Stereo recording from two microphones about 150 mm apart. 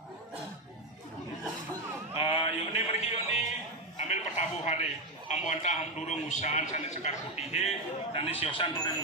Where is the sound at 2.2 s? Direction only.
35° left (ahead or behind).